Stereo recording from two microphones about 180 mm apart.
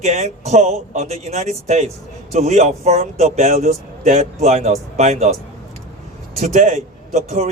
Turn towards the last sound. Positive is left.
turn(degrees=-40)  # may be behind; listen again after turning